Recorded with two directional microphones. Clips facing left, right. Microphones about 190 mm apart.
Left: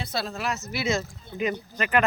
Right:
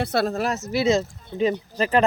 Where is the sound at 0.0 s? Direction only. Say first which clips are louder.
Right 9 dB; 60° right (ahead or behind).